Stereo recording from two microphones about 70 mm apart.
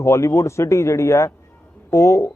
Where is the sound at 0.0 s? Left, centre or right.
Left.